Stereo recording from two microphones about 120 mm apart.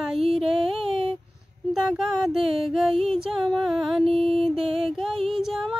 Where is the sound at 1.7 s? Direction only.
5° right (ahead or behind).